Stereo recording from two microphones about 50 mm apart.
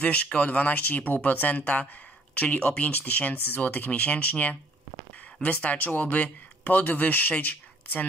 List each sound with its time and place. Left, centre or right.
0.0 s speech: left